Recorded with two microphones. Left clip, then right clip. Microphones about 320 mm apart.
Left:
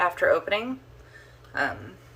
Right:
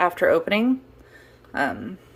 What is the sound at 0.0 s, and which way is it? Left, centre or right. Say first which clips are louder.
Speech: right 3 dB; right.